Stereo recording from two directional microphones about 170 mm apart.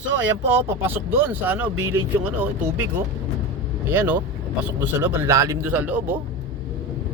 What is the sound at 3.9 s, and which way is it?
Speech, 10° right (ahead or behind).